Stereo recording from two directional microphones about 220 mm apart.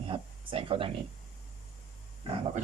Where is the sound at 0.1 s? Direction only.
25° right (ahead or behind).